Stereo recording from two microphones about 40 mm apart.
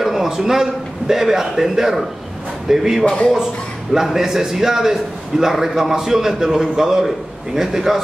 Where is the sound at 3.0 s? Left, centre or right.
Left.